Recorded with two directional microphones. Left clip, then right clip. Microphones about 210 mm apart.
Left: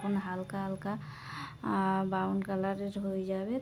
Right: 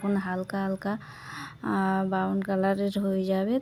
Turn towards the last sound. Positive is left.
turn(degrees=-30)  # may be behind; listen again after turning